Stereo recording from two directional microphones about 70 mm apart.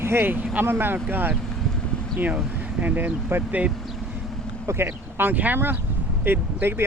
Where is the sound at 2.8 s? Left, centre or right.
Right.